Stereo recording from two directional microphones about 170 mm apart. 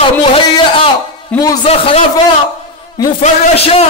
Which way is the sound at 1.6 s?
35° left (ahead or behind).